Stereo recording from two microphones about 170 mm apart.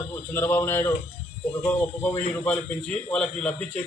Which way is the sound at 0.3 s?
15° left (ahead or behind).